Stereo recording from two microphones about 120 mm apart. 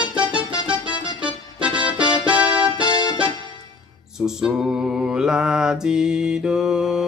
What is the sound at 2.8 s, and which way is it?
Keyboard, 40° left (ahead or behind).